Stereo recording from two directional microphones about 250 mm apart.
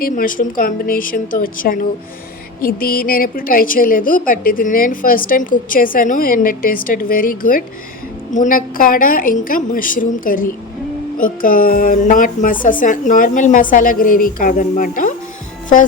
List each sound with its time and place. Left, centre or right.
0.0 s a woman's voice: left